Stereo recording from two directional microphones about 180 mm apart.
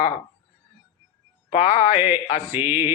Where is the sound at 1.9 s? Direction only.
10° right (ahead or behind).